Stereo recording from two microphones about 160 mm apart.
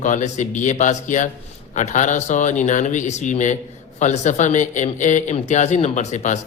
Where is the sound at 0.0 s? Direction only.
50° left (ahead or behind).